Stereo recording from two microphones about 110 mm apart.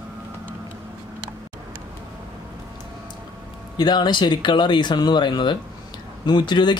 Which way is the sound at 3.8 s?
40° left (ahead or behind).